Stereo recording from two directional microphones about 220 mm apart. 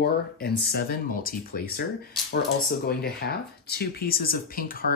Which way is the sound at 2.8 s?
45° left (ahead or behind).